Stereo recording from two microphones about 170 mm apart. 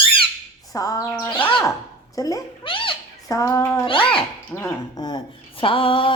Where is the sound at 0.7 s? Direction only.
20° left (ahead or behind).